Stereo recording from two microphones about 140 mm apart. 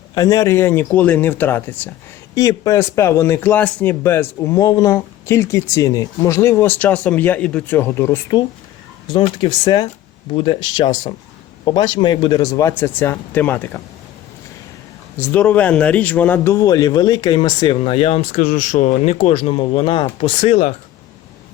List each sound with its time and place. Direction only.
0.1 s speech: 25° left (ahead or behind)
9.1 s a man's voice: 35° left (ahead or behind); by 13.8 s 15° left (ahead or behind)
15.2 s a man's voice: 10° left (ahead or behind); by 18.2 s 45° left (ahead or behind)
18.2 s speech: 65° left (ahead or behind); by 20.7 s 50° left (ahead or behind)